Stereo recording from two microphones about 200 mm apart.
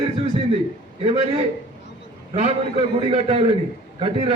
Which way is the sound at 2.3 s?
30° right (ahead or behind).